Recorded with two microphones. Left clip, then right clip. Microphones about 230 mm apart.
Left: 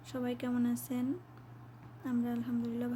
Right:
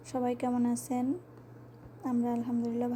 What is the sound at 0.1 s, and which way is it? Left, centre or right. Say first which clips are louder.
Speech: right 6 dB; centre.